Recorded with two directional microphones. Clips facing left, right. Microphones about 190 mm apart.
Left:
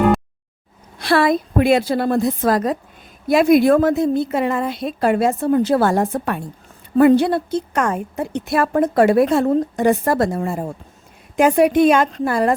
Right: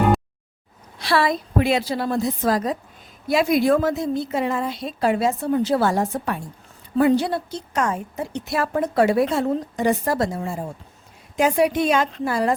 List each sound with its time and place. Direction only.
0.9 s a woman's voice: 50° left (ahead or behind)